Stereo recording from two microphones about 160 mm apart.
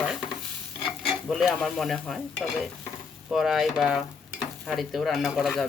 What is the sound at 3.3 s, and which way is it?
Speech, centre (ahead or behind).